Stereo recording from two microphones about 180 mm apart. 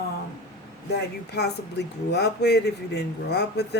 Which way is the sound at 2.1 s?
70° left (ahead or behind).